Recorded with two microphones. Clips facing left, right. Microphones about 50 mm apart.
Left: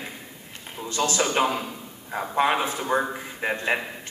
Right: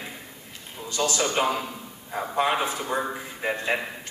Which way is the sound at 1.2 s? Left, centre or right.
Centre.